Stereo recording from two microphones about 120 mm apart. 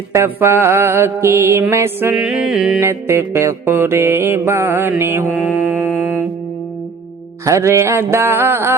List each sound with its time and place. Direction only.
0.1 s music: 25° right (ahead or behind)
2.2 s music: 5° right (ahead or behind)
2.8 s music: 20° right (ahead or behind)
7.4 s music: 25° right (ahead or behind)